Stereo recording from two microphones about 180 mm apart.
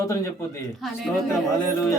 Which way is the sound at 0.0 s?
15° left (ahead or behind).